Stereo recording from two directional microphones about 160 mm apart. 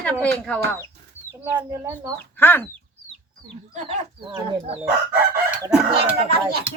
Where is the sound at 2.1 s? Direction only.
15° left (ahead or behind).